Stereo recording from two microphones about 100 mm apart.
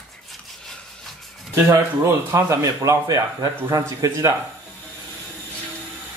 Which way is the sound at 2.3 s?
30° right (ahead or behind).